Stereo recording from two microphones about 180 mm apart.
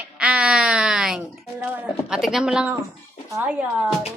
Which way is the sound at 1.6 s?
5° right (ahead or behind).